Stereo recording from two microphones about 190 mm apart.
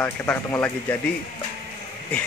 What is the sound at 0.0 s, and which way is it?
Speech, 10° left (ahead or behind).